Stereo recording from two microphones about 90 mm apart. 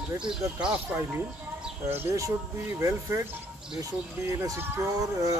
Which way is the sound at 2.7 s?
35° right (ahead or behind).